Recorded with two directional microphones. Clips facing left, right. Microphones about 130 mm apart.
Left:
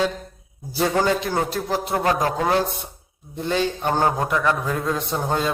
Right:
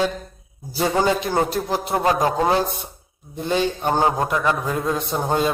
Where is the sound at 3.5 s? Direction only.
15° right (ahead or behind).